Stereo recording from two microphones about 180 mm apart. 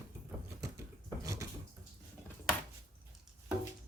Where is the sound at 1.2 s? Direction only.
15° right (ahead or behind).